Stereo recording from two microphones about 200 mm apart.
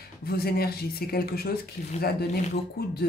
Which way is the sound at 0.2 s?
50° left (ahead or behind).